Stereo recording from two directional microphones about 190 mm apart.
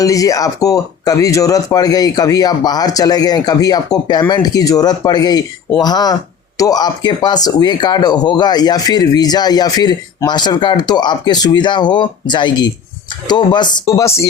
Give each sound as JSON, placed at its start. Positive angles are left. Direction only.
{"t": 0.0, "sound": "speech", "side_deg": 15}